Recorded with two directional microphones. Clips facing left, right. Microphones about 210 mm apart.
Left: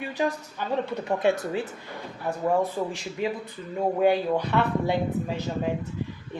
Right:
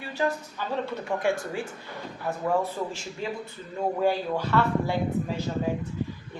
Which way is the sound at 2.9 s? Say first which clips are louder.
Left 4 dB; 15° left (ahead or behind).